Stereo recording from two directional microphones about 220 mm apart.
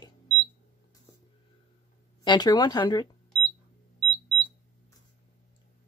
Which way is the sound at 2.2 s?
20° left (ahead or behind).